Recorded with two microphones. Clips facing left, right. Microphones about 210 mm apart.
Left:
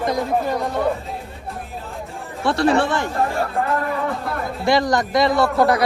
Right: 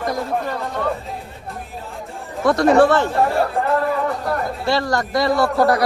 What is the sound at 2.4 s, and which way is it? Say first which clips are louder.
Speech: right 4 dB; 30° left (ahead or behind).